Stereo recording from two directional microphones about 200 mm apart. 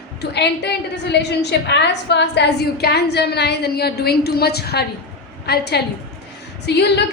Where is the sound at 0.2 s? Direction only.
55° left (ahead or behind).